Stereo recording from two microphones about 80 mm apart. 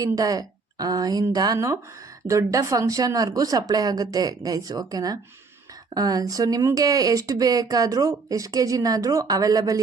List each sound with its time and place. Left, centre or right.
0.0 s a woman's voice: right
1.5 s speech: right